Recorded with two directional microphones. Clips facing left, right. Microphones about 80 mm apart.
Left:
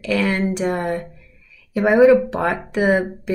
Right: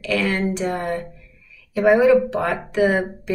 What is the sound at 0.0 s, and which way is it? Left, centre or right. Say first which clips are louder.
Speech: left 2 dB; centre.